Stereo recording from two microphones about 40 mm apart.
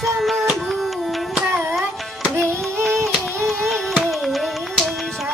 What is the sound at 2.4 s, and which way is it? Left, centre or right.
Music, right.